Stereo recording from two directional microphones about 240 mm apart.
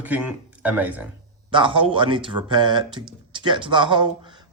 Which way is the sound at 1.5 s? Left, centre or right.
Right.